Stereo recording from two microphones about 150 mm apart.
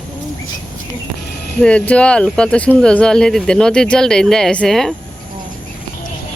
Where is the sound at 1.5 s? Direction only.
5° left (ahead or behind).